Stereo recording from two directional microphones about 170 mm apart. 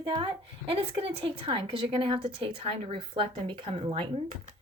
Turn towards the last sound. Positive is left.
turn(degrees=-35)  # may be behind; listen again after turning